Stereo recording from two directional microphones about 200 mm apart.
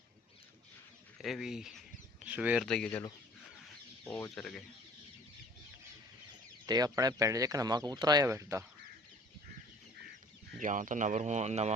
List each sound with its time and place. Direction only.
1.2 s speech: centre (ahead or behind)
2.6 s speech: 5° left (ahead or behind)
4.0 s speech: 10° left (ahead or behind)
6.7 s speech: 20° right (ahead or behind)
10.6 s speech: 40° right (ahead or behind)